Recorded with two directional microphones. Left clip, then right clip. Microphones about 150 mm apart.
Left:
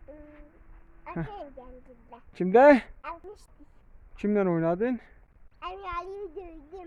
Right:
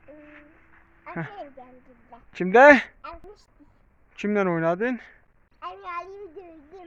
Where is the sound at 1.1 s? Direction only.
10° left (ahead or behind).